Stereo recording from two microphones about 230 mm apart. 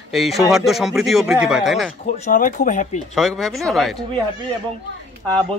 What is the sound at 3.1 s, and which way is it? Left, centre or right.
Speech, centre.